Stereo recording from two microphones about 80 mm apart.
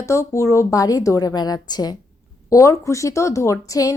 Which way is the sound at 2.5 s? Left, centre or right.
Left.